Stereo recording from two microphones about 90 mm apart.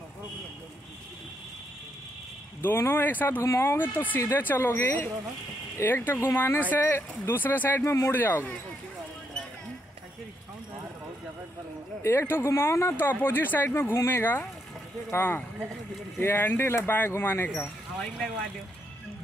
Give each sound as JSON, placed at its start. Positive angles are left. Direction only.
{"t": 2.6, "sound": "speech", "side_deg": 25}
{"t": 3.4, "sound": "speech", "side_deg": 30}
{"t": 12.0, "sound": "speech", "side_deg": 25}
{"t": 17.9, "sound": "speech", "side_deg": 5}